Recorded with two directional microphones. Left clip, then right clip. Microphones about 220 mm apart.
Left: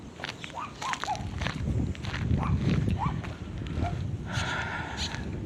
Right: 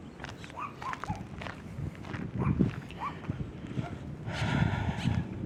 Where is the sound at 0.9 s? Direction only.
40° left (ahead or behind).